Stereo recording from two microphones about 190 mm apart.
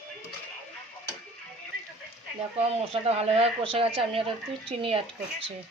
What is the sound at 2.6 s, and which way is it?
Speech, 30° right (ahead or behind).